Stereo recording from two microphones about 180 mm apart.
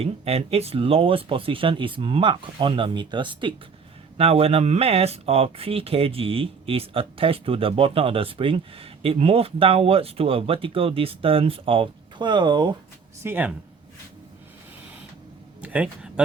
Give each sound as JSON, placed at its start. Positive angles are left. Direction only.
{"t": 0.0, "sound": "speech", "side_deg": -35}
{"t": 13.2, "sound": "speech", "side_deg": -10}
{"t": 15.6, "sound": "speech", "side_deg": -5}